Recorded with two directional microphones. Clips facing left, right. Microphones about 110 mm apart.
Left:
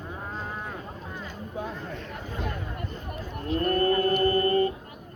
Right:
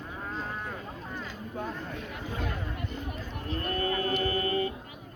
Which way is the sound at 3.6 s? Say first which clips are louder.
Left 7 dB; 50° left (ahead or behind).